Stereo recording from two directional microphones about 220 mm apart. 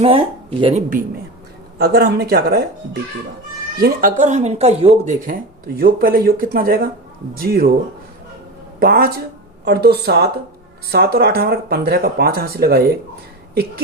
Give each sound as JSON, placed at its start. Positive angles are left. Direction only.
{"t": 0.0, "sound": "speech", "side_deg": -25}
{"t": 1.8, "sound": "speech", "side_deg": -45}
{"t": 8.8, "sound": "speech", "side_deg": -45}
{"t": 13.5, "sound": "a sound", "side_deg": -45}